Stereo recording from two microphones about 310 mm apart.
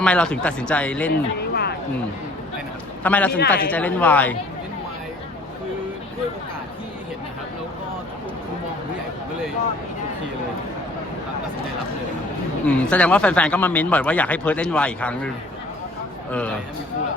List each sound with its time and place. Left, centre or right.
0.0 s speech: centre
1.4 s a sound: left
3.0 s speech: centre
12.6 s speech: centre